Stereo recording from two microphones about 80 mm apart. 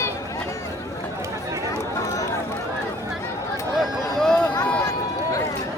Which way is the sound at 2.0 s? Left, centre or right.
Left.